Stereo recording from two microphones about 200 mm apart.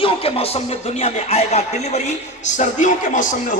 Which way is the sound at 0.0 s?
25° left (ahead or behind).